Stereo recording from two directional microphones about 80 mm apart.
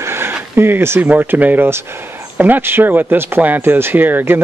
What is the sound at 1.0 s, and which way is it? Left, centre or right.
Speech, right.